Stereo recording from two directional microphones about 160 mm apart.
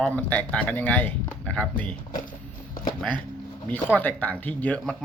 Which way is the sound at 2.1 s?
55° left (ahead or behind).